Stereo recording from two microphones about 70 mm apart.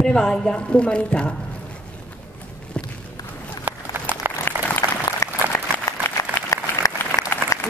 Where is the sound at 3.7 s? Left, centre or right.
Right.